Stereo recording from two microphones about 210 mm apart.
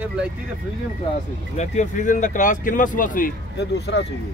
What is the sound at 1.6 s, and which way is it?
Speech, 35° left (ahead or behind).